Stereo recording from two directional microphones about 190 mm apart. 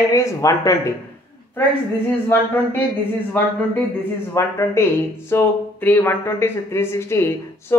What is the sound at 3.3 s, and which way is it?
Speech, 10° left (ahead or behind).